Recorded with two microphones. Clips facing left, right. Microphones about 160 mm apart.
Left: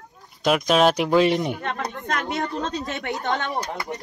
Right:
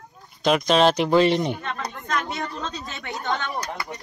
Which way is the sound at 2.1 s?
60° left (ahead or behind).